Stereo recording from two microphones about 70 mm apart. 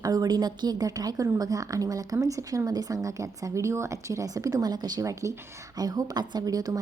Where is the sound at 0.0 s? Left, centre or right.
Right.